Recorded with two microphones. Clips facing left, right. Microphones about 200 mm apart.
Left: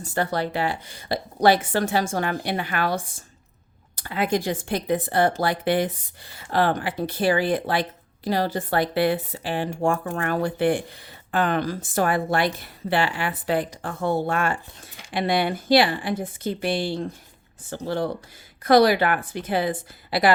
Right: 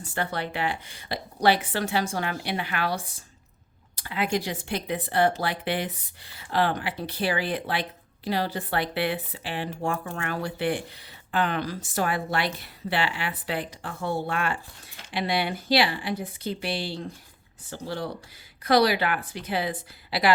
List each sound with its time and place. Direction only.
0.0 s speech: 40° left (ahead or behind)